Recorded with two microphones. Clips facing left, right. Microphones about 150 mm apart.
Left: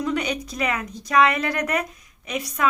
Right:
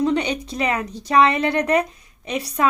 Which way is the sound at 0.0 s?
30° right (ahead or behind).